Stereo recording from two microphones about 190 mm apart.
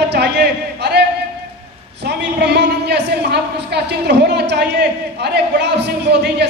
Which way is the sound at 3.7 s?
60° right (ahead or behind).